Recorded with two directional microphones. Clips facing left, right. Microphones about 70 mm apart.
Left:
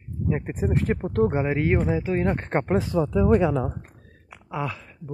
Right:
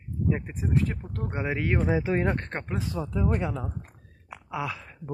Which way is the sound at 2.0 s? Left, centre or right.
Right.